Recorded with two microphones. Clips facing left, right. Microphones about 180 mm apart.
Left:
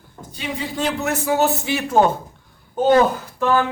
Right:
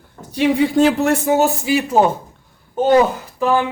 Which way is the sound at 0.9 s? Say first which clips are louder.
Right 5 dB; 30° right (ahead or behind).